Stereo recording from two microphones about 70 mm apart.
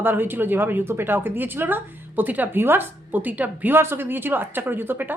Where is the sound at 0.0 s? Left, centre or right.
Right.